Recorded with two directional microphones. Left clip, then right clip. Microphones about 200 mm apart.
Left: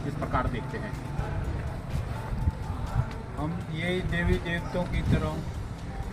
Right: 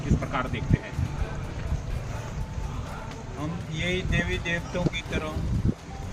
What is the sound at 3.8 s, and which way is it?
Speech, centre (ahead or behind).